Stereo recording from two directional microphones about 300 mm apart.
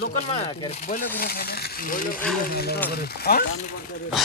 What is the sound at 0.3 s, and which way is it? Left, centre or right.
Speech, left.